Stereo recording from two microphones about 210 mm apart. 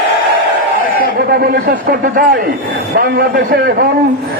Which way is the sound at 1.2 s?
50° right (ahead or behind).